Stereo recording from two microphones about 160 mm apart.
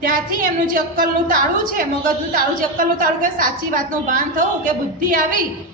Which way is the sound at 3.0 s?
60° right (ahead or behind).